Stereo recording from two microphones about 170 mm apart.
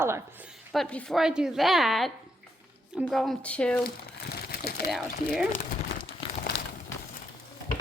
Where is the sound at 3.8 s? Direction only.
65° left (ahead or behind).